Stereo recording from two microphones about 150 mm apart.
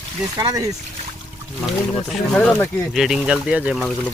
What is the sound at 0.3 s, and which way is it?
Speech, 20° right (ahead or behind).